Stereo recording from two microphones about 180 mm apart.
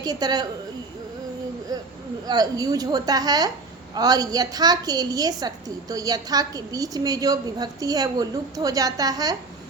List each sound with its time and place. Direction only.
0.0 s a woman's voice: 20° right (ahead or behind)
1.7 s a woman's voice: 20° right (ahead or behind)